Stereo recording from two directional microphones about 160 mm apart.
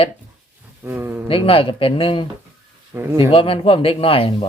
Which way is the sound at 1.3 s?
35° left (ahead or behind).